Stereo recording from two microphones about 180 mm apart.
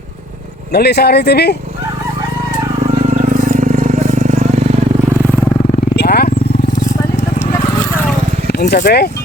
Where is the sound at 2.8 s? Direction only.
50° right (ahead or behind).